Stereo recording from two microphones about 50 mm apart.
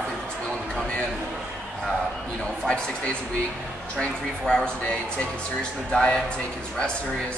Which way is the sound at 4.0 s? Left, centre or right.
Centre.